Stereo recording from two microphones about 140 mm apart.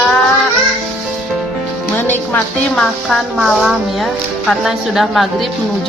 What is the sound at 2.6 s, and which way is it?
Speech, 5° left (ahead or behind).